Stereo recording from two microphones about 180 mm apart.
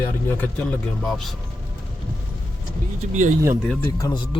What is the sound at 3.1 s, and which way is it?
Speech, 40° right (ahead or behind).